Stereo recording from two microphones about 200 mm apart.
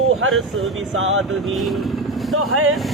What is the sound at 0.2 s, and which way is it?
Speech, 90° right.